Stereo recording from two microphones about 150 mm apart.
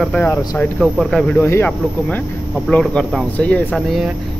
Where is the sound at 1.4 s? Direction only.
15° left (ahead or behind).